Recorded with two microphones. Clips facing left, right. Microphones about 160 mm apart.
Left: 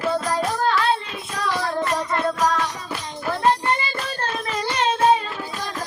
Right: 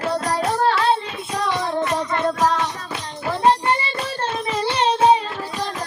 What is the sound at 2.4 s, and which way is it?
Music, 25° right (ahead or behind).